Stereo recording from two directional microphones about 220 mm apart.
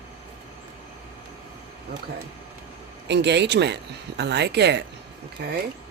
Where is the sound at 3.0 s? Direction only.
50° right (ahead or behind).